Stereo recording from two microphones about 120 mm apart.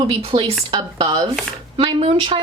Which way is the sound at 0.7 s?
40° right (ahead or behind).